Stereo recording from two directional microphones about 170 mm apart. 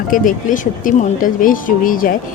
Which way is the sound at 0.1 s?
50° left (ahead or behind).